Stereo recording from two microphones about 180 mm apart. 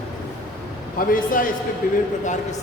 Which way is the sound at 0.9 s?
50° left (ahead or behind).